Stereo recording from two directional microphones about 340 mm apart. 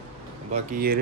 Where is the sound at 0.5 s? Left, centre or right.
Right.